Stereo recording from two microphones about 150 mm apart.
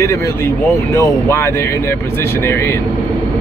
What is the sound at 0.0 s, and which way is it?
Speech, 20° left (ahead or behind).